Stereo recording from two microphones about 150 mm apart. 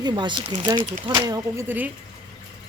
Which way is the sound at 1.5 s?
15° right (ahead or behind).